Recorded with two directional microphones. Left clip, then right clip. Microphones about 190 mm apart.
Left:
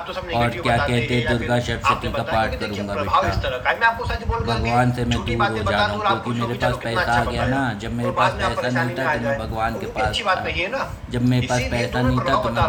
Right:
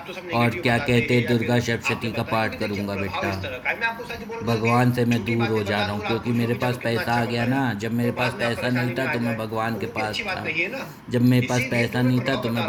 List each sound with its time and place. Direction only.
0.3 s a man's voice: 20° right (ahead or behind)